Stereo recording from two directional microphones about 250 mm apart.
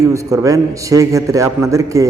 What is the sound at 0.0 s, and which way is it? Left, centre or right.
A man's voice, centre.